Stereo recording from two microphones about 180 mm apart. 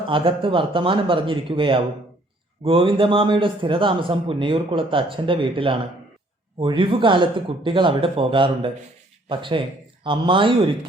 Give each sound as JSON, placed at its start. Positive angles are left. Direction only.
{"t": 0.0, "sound": "a man's voice", "side_deg": -30}